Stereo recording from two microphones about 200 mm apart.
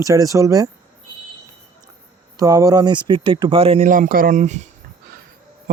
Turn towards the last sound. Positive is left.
turn(degrees=-35)  # may be behind; listen again after turning